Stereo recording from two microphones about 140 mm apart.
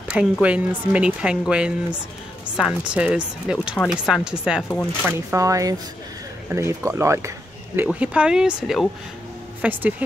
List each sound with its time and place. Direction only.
0.1 s speech: 10° right (ahead or behind)
3.8 s speech: 10° left (ahead or behind)
4.1 s speech: 5° right (ahead or behind)
5.0 s speech: 20° right (ahead or behind)